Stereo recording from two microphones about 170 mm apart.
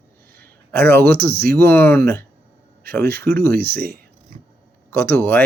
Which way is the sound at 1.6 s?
15° left (ahead or behind).